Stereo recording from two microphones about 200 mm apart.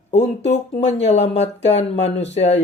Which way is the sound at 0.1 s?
35° left (ahead or behind).